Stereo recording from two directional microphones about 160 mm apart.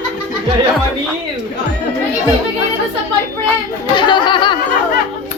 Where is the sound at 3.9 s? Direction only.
30° left (ahead or behind).